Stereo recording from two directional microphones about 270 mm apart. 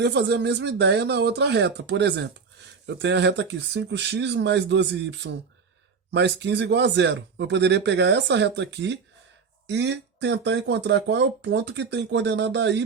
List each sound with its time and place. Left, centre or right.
0.0 s speech: right